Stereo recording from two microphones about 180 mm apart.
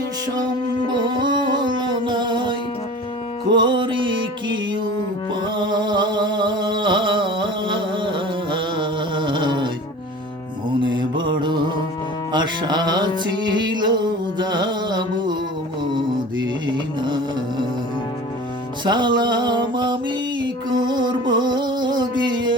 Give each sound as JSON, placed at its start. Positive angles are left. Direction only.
{"t": 0.9, "sound": "music", "side_deg": -25}
{"t": 5.5, "sound": "a sound", "side_deg": -25}
{"t": 10.8, "sound": "mantra", "side_deg": -25}
{"t": 12.3, "sound": "music", "side_deg": -25}
{"t": 16.6, "sound": "music", "side_deg": -25}
{"t": 18.9, "sound": "a sound", "side_deg": -25}